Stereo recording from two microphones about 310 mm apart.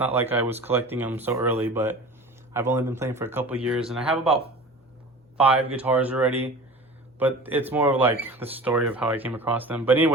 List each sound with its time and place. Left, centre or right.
0.0 s speech: centre
5.4 s speech: centre